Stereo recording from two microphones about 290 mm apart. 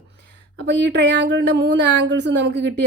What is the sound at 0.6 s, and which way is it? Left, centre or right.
Speech, right.